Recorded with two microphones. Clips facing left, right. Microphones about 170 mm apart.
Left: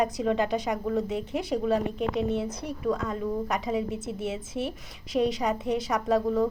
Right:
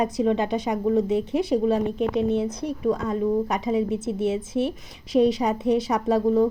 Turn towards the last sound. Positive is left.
turn(degrees=-25)  # may be behind; listen again after turning